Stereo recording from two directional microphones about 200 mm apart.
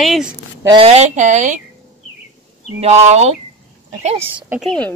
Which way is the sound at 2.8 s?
35° right (ahead or behind).